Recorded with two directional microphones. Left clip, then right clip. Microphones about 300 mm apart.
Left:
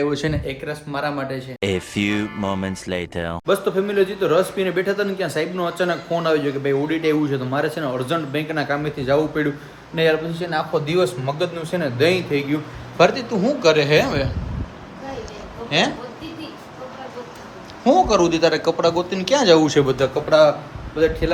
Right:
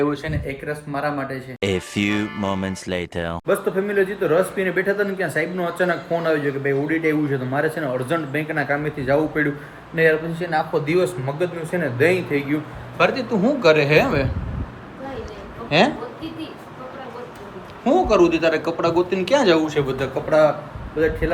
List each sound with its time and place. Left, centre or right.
0.2 s speech: left
0.9 s speech: centre
15.7 s speech: centre
17.8 s speech: centre
19.6 s speech: left
21.0 s speech: centre